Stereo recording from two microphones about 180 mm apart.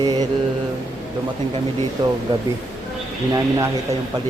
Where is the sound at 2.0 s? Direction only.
25° right (ahead or behind).